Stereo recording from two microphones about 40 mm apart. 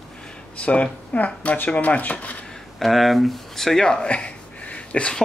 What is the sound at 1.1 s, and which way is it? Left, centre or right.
Speech, left.